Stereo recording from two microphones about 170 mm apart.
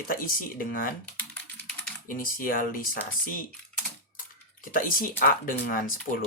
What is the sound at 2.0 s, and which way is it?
Speech, 55° left (ahead or behind).